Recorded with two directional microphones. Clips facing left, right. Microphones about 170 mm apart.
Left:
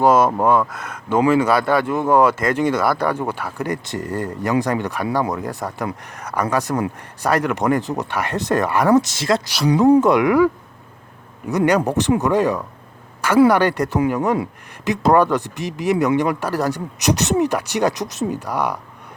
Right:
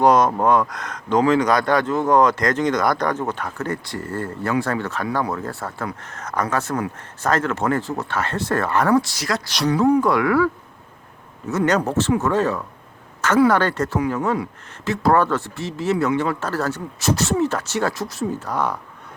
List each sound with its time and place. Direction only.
0.0 s speech: 5° left (ahead or behind); by 9.4 s 25° left (ahead or behind)
9.5 s speech: 10° left (ahead or behind)